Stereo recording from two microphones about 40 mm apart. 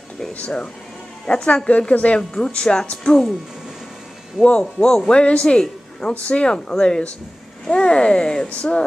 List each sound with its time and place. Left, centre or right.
1.2 s speech: left
2.1 s speech: left
4.5 s speech: left
6.5 s speech: centre